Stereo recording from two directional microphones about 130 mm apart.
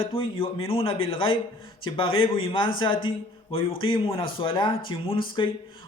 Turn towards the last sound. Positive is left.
turn(degrees=40)  # may be behind; listen again after turning